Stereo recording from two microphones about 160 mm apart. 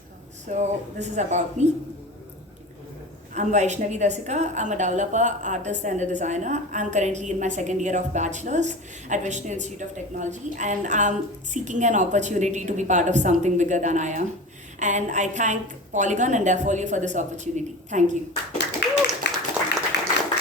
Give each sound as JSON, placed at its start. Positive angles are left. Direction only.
{"t": 0.5, "sound": "a woman's voice", "side_deg": -45}
{"t": 3.3, "sound": "a woman's voice", "side_deg": -45}
{"t": 18.8, "sound": "a sound", "side_deg": 90}